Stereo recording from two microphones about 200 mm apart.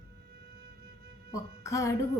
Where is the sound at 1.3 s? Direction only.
15° left (ahead or behind).